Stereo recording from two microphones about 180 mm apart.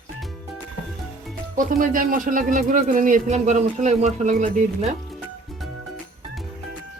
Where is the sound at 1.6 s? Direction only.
50° right (ahead or behind).